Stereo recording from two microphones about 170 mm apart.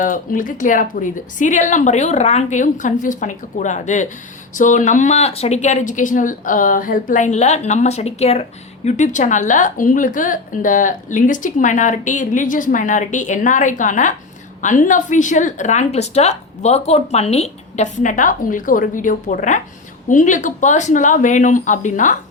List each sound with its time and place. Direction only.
0.0 s speech: 50° left (ahead or behind)